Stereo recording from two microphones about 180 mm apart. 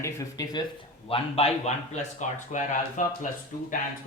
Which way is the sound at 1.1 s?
35° left (ahead or behind).